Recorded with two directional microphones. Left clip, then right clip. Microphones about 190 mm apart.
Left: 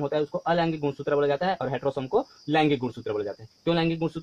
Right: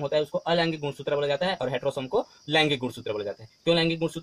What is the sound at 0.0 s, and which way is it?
Speech, 25° left (ahead or behind).